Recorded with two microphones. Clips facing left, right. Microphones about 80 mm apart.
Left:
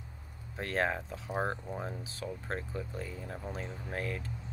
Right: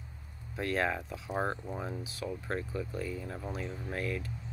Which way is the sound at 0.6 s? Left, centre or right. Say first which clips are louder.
Right 1 dB; left.